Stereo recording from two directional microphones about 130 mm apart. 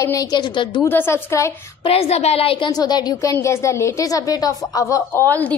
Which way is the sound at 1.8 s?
50° left (ahead or behind).